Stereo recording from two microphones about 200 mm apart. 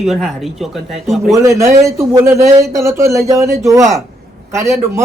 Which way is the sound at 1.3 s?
15° right (ahead or behind).